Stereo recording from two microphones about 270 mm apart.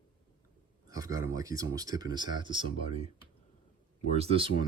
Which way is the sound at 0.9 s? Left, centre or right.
Centre.